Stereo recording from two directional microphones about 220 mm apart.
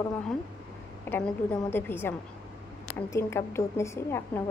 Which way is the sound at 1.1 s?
10° left (ahead or behind).